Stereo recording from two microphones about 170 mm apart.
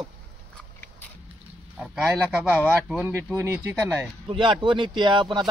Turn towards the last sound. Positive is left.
turn(degrees=-25)  # may be behind; listen again after turning